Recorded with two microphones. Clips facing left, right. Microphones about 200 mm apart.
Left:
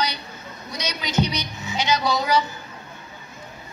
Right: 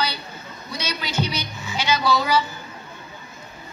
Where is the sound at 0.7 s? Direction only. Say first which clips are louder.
Even; 20° left (ahead or behind).